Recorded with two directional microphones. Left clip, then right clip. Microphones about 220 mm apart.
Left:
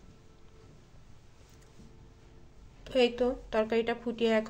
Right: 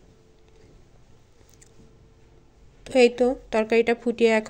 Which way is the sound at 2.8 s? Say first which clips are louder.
Right 9 dB; 35° right (ahead or behind).